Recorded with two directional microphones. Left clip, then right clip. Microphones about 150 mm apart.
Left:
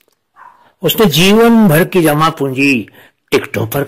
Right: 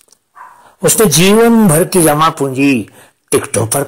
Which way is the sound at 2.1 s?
20° left (ahead or behind).